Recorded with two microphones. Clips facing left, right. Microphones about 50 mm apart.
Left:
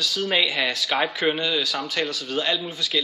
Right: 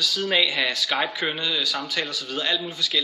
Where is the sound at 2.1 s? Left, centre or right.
Left.